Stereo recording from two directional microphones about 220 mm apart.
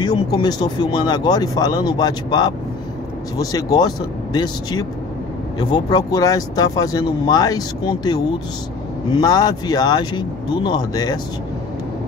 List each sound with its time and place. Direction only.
0.0 s speech: 20° left (ahead or behind)